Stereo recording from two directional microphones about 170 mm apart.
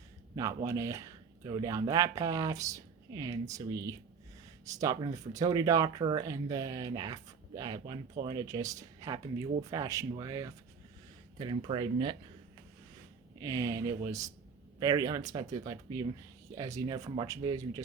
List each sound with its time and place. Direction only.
0.3 s speech: 20° right (ahead or behind)
13.4 s speech: 20° right (ahead or behind)